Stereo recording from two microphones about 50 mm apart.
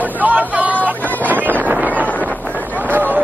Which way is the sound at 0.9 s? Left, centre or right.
Right.